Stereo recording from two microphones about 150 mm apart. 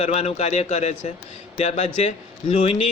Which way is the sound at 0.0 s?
45° left (ahead or behind).